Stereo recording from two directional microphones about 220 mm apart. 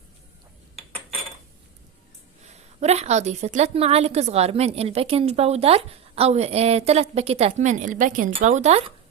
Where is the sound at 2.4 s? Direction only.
30° right (ahead or behind).